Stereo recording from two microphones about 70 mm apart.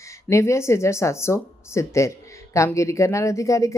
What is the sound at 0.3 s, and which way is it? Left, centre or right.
Speech, left.